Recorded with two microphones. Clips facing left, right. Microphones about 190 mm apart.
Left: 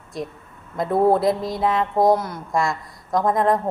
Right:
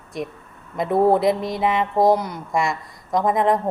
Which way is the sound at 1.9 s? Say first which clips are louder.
Right 1 dB; centre (ahead or behind).